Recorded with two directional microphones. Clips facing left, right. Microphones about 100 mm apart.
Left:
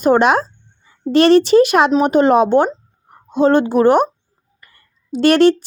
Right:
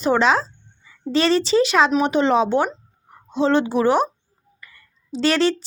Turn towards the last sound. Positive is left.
turn(degrees=55)  # may be behind; listen again after turning